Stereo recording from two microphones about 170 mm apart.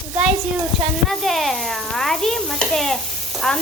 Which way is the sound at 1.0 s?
Centre (ahead or behind).